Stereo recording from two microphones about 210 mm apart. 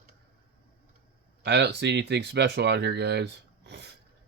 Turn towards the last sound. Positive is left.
turn(degrees=-55)  # may be behind; listen again after turning